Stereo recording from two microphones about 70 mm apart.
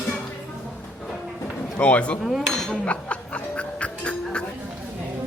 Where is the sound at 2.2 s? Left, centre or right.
Centre.